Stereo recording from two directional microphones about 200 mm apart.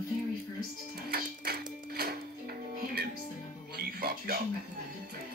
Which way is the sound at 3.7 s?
50° right (ahead or behind).